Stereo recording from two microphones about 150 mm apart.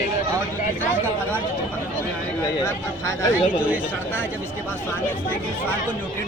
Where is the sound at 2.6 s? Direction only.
20° left (ahead or behind).